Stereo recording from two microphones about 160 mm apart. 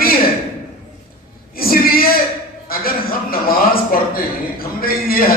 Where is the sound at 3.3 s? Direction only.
65° left (ahead or behind).